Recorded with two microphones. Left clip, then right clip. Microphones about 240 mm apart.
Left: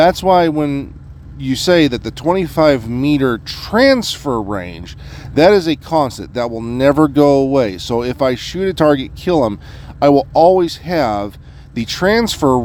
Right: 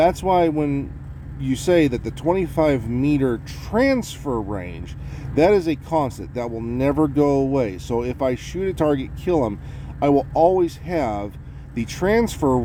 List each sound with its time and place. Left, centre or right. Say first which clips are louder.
0.0 s speech: left 6 dB; left